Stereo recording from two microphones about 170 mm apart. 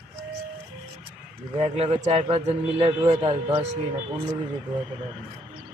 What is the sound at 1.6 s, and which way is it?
A man's voice, 40° right (ahead or behind).